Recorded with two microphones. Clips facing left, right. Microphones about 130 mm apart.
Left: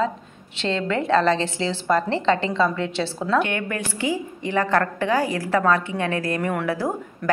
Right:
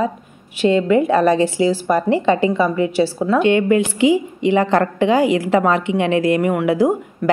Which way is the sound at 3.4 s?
20° right (ahead or behind).